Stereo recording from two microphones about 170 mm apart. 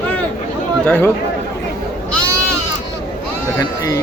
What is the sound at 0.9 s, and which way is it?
Speech, 10° left (ahead or behind).